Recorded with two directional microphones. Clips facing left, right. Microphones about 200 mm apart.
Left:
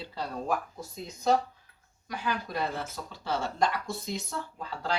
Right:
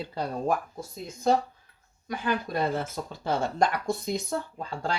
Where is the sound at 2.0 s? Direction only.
50° right (ahead or behind).